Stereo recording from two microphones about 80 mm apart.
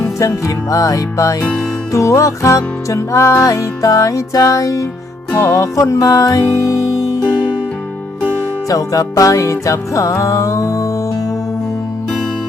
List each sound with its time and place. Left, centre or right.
0.2 s music: left
7.3 s music: left
8.7 s music: left